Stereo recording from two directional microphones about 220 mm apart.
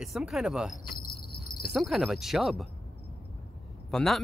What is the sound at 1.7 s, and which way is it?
Speech, centre (ahead or behind).